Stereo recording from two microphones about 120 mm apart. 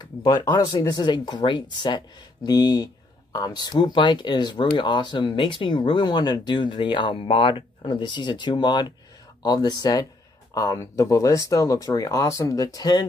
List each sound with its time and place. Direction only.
0.0 s speech: 35° left (ahead or behind)